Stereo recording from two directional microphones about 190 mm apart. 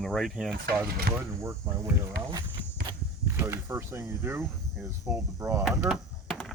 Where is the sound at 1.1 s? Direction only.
50° right (ahead or behind).